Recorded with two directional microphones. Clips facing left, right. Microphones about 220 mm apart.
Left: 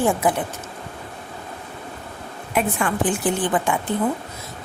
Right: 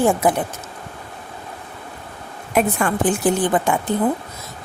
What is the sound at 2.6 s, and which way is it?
A woman's voice, 40° right (ahead or behind).